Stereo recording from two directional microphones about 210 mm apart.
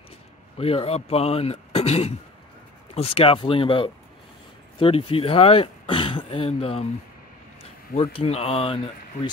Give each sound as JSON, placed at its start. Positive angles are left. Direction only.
{"t": 0.6, "sound": "speech", "side_deg": 30}
{"t": 7.9, "sound": "speech", "side_deg": 25}